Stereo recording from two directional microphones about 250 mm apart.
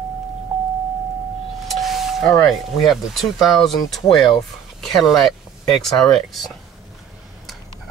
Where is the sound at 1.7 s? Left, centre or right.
Centre.